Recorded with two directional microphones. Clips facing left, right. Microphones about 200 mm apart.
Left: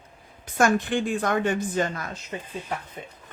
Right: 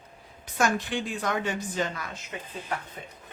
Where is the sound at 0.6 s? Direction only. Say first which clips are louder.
Left 5 dB; 50° left (ahead or behind).